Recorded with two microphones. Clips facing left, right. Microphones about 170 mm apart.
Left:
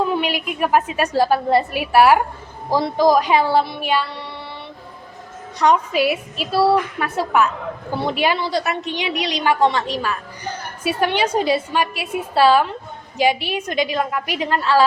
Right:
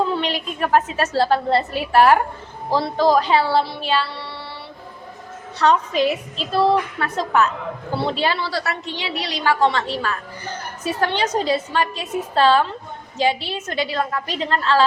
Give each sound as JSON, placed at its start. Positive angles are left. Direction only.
{"t": 0.1, "sound": "a woman's voice", "side_deg": 10}
{"t": 5.5, "sound": "a woman's voice", "side_deg": 15}